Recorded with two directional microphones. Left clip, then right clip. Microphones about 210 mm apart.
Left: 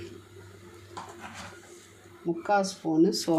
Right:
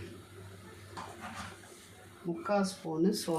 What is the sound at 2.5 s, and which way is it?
Speech, 45° left (ahead or behind).